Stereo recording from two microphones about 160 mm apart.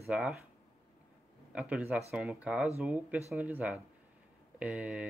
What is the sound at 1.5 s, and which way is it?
Speech, 10° right (ahead or behind).